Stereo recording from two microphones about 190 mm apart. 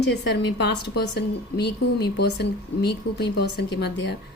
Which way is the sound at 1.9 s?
60° left (ahead or behind).